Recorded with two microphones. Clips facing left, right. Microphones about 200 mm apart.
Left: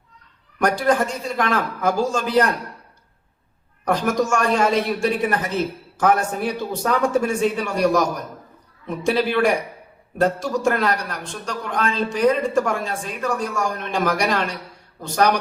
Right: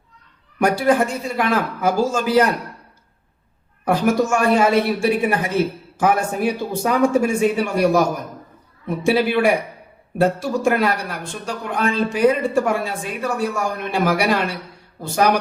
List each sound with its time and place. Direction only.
0.6 s a man's voice: 10° right (ahead or behind)
3.8 s a man's voice: 5° right (ahead or behind)